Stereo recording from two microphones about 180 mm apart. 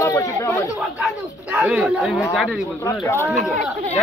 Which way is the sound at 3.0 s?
15° left (ahead or behind).